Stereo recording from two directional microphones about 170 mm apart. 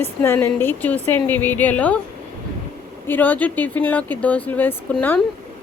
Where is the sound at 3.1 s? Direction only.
10° left (ahead or behind).